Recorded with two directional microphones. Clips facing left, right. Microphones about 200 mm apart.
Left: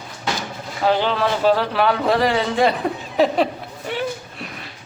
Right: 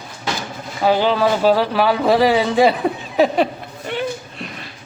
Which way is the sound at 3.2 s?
Centre (ahead or behind).